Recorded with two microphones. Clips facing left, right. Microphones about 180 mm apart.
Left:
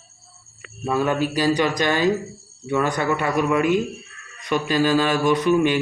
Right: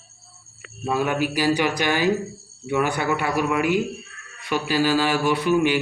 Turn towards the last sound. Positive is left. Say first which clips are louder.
# left 2 dB
turn(degrees=-10)  # may be behind; listen again after turning